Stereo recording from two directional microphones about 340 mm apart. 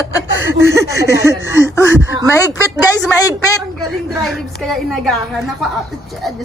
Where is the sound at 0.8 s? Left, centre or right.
Left.